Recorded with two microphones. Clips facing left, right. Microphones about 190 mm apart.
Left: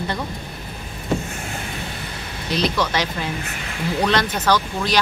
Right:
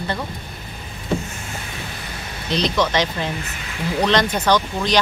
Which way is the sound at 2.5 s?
10° left (ahead or behind).